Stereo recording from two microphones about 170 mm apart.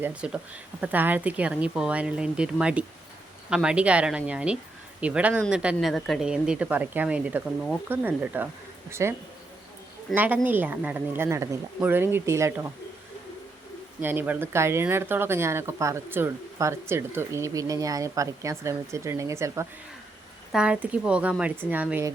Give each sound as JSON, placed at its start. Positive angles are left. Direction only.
{"t": 0.0, "sound": "speech", "side_deg": -10}
{"t": 10.2, "sound": "speech", "side_deg": -10}
{"t": 14.0, "sound": "speech", "side_deg": -10}
{"t": 20.5, "sound": "speech", "side_deg": -5}